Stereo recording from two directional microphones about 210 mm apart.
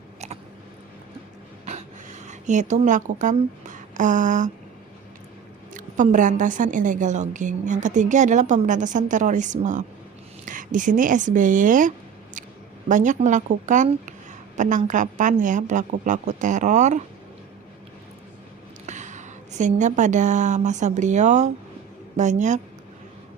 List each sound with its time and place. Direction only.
1.6 s speech: 35° right (ahead or behind)
5.7 s a woman's voice: 35° right (ahead or behind)
18.9 s a woman's voice: 35° right (ahead or behind)